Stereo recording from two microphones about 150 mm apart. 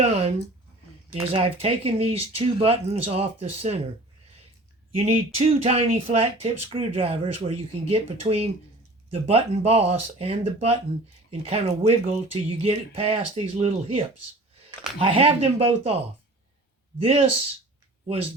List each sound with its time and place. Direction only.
0.0 s speech: 45° right (ahead or behind)
4.9 s speech: 45° right (ahead or behind)
17.0 s speech: 40° right (ahead or behind)